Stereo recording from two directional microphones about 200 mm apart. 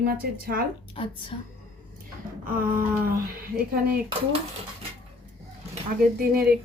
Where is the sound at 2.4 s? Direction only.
45° right (ahead or behind).